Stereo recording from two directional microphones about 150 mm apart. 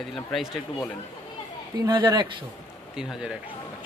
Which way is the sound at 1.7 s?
30° right (ahead or behind).